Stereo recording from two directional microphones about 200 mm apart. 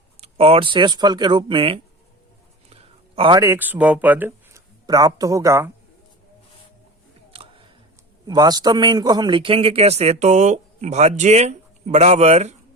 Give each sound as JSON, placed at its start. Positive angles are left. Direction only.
{"t": 0.2, "sound": "speech", "side_deg": -30}
{"t": 3.2, "sound": "speech", "side_deg": -20}
{"t": 8.3, "sound": "speech", "side_deg": -20}